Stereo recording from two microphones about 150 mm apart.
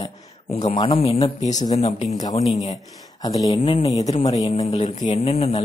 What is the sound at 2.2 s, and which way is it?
Speech, 25° left (ahead or behind).